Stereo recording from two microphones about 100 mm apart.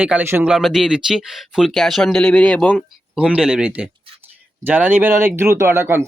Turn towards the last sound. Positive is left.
turn(degrees=-25)  # may be behind; listen again after turning